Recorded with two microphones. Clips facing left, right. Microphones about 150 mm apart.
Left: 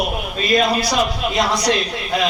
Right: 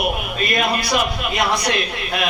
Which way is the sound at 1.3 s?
60° right (ahead or behind).